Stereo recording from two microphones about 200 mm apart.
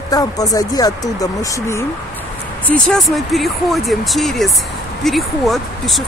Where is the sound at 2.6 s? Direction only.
5° left (ahead or behind).